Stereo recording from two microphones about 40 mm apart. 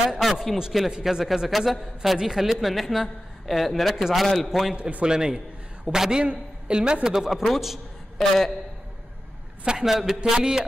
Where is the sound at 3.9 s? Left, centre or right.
Centre.